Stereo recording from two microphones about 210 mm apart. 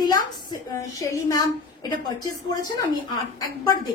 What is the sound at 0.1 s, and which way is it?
A woman's voice, 15° left (ahead or behind).